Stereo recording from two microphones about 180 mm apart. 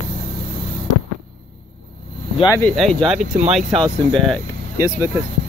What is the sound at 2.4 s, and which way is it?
Speech, 15° left (ahead or behind).